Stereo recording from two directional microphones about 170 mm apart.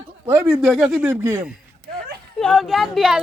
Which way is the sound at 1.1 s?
15° right (ahead or behind).